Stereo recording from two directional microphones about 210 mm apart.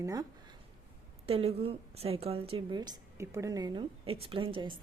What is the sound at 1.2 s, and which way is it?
A woman's voice, 30° right (ahead or behind).